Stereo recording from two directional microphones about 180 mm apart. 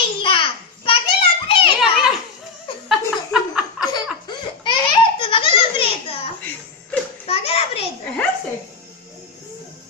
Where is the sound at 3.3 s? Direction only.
5° right (ahead or behind).